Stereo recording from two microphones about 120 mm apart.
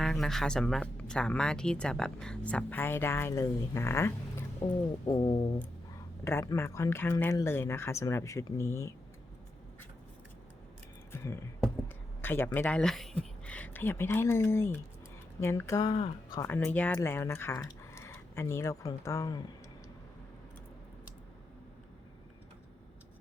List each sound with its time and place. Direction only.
0.0 s speech: 5° left (ahead or behind); by 8.9 s 25° left (ahead or behind)
11.1 s music: 20° left (ahead or behind)
12.2 s speech: 20° left (ahead or behind)
15.9 s speech: 40° left (ahead or behind)
16.4 s speech: 20° left (ahead or behind)